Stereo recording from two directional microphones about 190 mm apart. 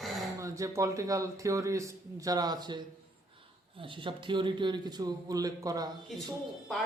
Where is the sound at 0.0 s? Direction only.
Centre (ahead or behind).